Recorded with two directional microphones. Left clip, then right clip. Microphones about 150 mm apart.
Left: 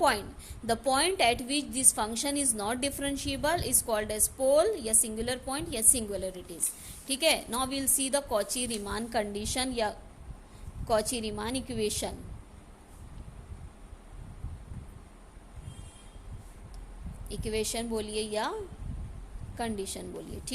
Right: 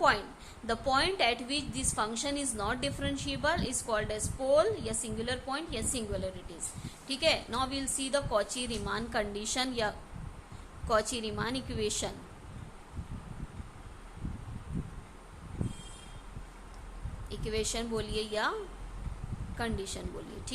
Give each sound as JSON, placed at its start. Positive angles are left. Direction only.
{"t": 0.0, "sound": "a woman's voice", "side_deg": 50}
{"t": 17.2, "sound": "speech", "side_deg": 40}
{"t": 19.5, "sound": "speech", "side_deg": 40}